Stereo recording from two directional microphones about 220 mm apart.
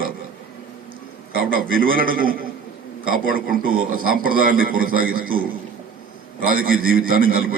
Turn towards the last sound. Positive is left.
turn(degrees=-40)  # may be behind; listen again after turning